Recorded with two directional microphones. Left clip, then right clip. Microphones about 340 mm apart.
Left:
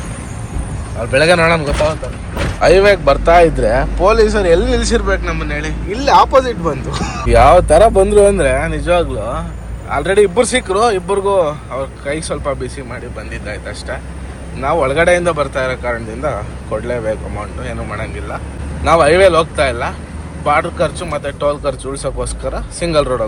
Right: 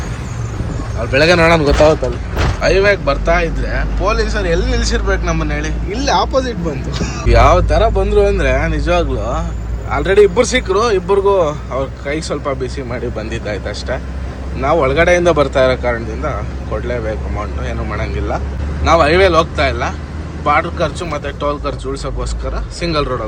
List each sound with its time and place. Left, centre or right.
1.1 s speech: centre